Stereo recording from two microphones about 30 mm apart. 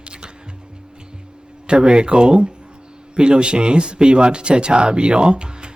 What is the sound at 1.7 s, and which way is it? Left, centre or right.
A man's voice, right.